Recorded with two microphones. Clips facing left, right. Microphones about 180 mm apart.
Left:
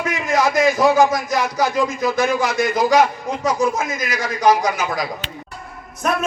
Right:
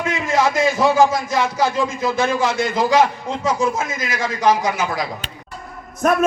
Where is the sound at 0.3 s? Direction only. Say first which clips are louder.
Left 1 dB; 15° left (ahead or behind).